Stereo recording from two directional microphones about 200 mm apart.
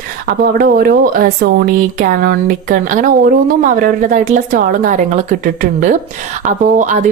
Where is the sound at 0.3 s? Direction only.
50° right (ahead or behind).